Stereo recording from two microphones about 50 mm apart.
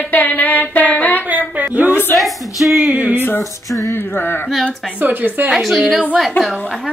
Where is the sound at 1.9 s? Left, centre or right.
Left.